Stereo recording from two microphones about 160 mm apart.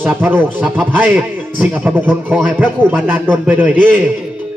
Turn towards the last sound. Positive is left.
turn(degrees=-10)  # may be behind; listen again after turning